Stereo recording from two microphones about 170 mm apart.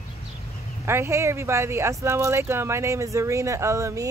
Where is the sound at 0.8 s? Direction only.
15° right (ahead or behind).